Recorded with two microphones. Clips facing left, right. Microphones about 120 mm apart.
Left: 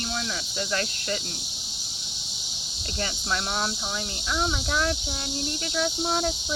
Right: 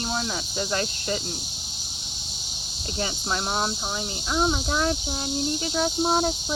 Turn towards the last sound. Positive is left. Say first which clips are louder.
# right 3 dB
turn(degrees=-25)  # may be behind; listen again after turning